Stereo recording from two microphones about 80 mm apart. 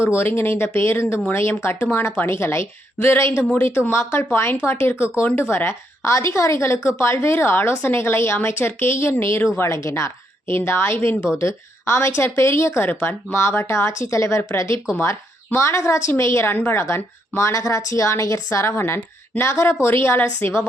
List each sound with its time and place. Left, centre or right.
0.0 s a woman's voice: left